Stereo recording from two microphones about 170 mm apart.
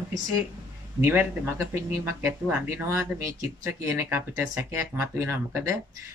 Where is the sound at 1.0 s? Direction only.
15° right (ahead or behind).